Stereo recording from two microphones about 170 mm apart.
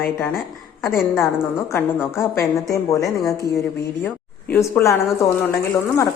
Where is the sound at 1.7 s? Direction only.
15° left (ahead or behind).